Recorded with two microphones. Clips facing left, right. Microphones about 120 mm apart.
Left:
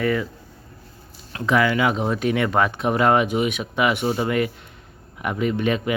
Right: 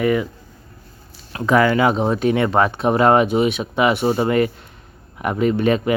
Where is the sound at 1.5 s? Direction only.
40° right (ahead or behind).